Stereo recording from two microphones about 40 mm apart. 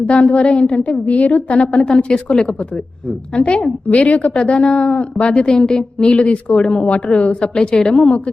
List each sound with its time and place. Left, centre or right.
0.0 s a woman's voice: left
1.7 s a woman's voice: left
4.4 s a woman's voice: left